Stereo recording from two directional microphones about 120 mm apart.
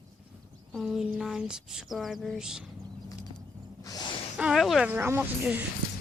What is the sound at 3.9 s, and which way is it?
Gasp, 40° left (ahead or behind).